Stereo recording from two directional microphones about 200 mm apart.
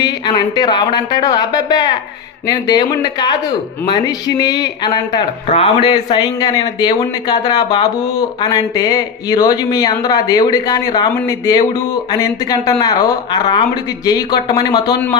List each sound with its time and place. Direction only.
0.0 s a man's voice: 20° left (ahead or behind)